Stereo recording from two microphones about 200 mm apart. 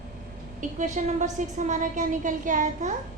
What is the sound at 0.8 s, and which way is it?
A woman's voice, 35° right (ahead or behind).